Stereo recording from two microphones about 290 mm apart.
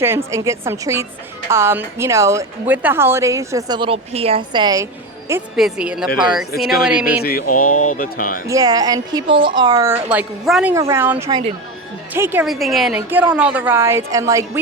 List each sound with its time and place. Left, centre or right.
0.0 s a woman's voice: centre
5.3 s speech: centre
7.2 s speech: left
8.4 s a woman's voice: centre